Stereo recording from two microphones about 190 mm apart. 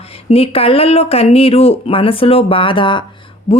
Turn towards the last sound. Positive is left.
turn(degrees=30)  # may be behind; listen again after turning